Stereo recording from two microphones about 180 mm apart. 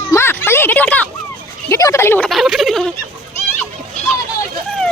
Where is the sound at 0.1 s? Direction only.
15° left (ahead or behind).